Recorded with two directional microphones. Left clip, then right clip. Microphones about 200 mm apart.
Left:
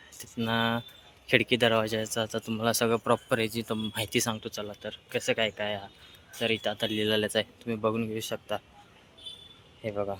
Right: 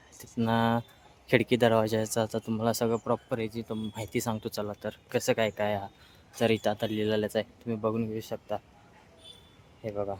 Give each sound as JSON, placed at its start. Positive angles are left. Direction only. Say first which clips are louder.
{"t": 0.1, "sound": "speech", "louder": "right 1 dB", "side_deg": -20}
{"t": 3.0, "sound": "speech", "louder": "left 4 dB", "side_deg": 0}
{"t": 4.4, "sound": "speech", "louder": "right 2 dB", "side_deg": -25}
{"t": 9.8, "sound": "speech", "louder": "left 1 dB", "side_deg": 0}